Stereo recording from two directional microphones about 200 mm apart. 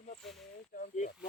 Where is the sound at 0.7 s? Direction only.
40° left (ahead or behind).